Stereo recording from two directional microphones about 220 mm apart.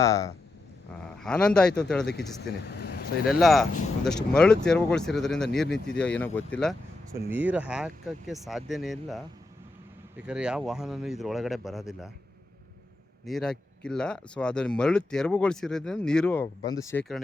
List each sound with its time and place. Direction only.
0.0 s speech: 15° left (ahead or behind)
1.2 s speech: 5° left (ahead or behind)
2.5 s speech: 45° left (ahead or behind)
3.2 s speech: centre (ahead or behind)
7.3 s speech: 10° right (ahead or behind)
13.2 s speech: centre (ahead or behind)